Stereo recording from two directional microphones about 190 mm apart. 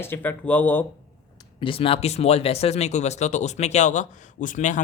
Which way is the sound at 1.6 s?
30° left (ahead or behind).